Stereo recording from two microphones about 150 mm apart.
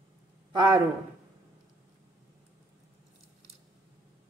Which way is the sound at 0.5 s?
25° right (ahead or behind).